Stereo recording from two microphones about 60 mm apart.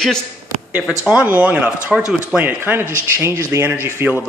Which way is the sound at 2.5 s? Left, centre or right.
Right.